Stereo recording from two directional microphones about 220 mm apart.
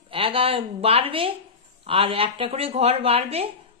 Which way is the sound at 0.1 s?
25° right (ahead or behind).